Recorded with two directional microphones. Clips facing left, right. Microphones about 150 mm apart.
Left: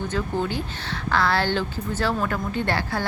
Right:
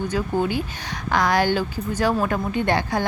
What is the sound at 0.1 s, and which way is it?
A woman's voice, 10° right (ahead or behind).